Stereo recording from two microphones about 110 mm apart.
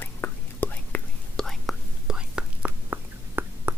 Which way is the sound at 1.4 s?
Centre (ahead or behind).